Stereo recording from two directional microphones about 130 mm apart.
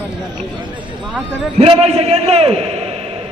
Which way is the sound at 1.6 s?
55° right (ahead or behind).